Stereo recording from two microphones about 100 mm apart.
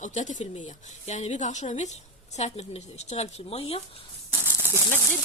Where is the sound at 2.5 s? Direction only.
90° left.